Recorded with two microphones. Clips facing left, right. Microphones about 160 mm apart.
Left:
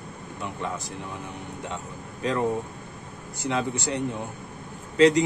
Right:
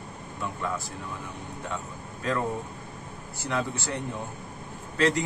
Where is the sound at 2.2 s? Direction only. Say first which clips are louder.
Left 2 dB; 20° left (ahead or behind).